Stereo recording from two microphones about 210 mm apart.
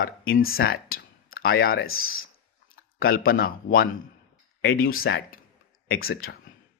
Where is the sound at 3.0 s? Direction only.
45° left (ahead or behind).